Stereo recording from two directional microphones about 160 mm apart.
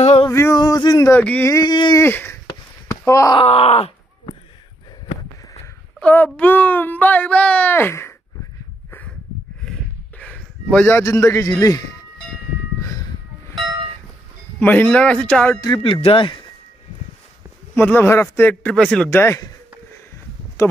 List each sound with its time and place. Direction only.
0.0 s male singing: 40° left (ahead or behind)
0.3 s male singing: 15° left (ahead or behind)
0.6 s speech: 25° left (ahead or behind)
1.5 s speech: 25° left (ahead or behind)
2.0 s speech: 15° left (ahead or behind)
2.4 s a sound: 20° left (ahead or behind)
3.3 s groan: 40° left (ahead or behind)
5.9 s speech: 10° left (ahead or behind)
9.7 s a sound: 5° left (ahead or behind); by 11.9 s 20° left (ahead or behind)
14.6 s speech: 10° left (ahead or behind)
15.6 s speech: 30° left (ahead or behind)
17.7 s speech: 15° left (ahead or behind)